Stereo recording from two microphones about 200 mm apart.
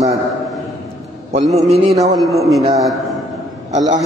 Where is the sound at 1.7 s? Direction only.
30° right (ahead or behind).